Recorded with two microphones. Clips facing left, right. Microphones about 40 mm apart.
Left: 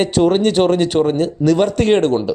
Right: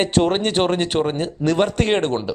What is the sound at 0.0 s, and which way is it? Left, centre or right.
Speech, centre.